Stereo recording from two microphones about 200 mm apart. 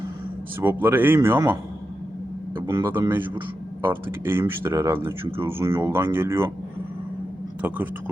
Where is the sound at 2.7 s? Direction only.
10° right (ahead or behind).